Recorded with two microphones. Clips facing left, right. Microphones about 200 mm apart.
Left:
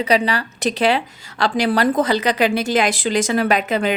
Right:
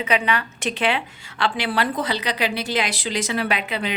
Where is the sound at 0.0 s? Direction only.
35° left (ahead or behind).